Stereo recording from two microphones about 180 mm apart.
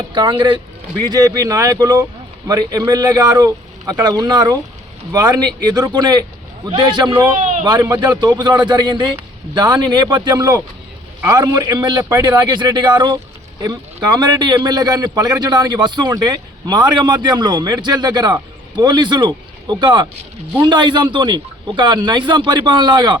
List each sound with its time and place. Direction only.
0.1 s a man's voice: 25° right (ahead or behind)
7.3 s a sound: 40° right (ahead or behind)
7.6 s a man's voice: 20° right (ahead or behind)